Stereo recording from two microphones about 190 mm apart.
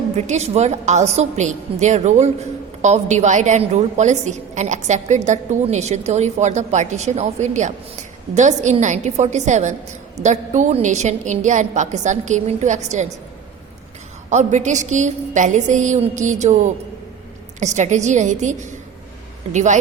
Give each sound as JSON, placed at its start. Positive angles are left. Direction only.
{"t": 0.2, "sound": "a woman's voice", "side_deg": -35}
{"t": 14.3, "sound": "a woman's voice", "side_deg": -40}
{"t": 19.5, "sound": "a woman's voice", "side_deg": -40}